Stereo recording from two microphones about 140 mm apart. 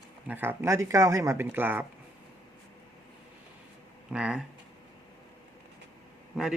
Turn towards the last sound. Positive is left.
turn(degrees=-5)  # may be behind; listen again after turning